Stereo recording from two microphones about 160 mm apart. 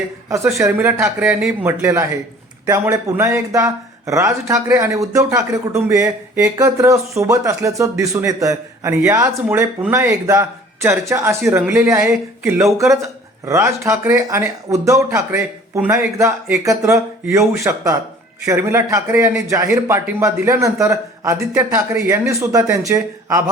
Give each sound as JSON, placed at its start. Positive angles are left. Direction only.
{"t": 0.3, "sound": "speech", "side_deg": -15}